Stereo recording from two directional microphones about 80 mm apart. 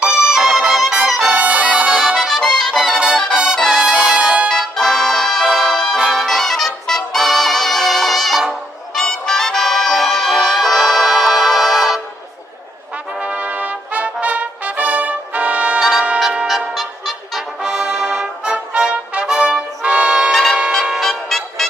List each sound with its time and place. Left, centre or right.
0.0 s music: centre
1.3 s music: centre
2.7 s music: centre
3.2 s brass instrument: centre
4.5 s music: centre
13.1 s brass instrument: centre
15.8 s brass instrument: centre
16.5 s music: centre
17.7 s brass instrument: centre
20.3 s music: centre
20.8 s music: centre
21.1 s music: centre